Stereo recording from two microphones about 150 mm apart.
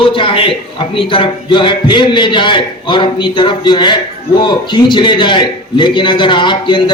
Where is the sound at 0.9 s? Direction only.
35° left (ahead or behind).